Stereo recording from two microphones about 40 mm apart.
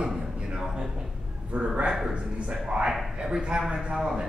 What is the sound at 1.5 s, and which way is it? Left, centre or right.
A man's voice, right.